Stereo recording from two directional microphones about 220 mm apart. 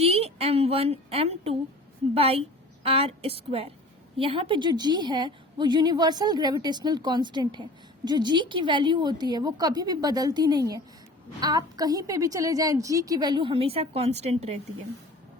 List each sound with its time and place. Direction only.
0.0 s a woman's voice: 30° right (ahead or behind)